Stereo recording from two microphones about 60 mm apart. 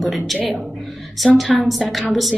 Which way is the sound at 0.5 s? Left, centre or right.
Centre.